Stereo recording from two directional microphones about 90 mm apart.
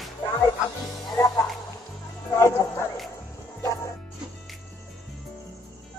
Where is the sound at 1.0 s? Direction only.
45° left (ahead or behind).